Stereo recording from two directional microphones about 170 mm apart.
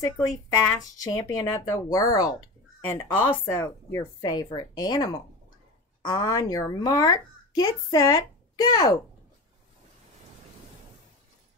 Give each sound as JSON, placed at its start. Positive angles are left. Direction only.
{"t": 0.0, "sound": "a child's voice", "side_deg": 15}